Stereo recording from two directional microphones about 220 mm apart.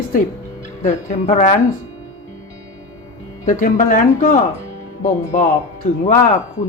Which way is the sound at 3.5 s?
35° left (ahead or behind).